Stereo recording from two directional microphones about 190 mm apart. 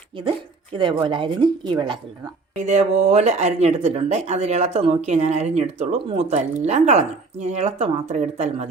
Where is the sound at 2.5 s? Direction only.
40° right (ahead or behind).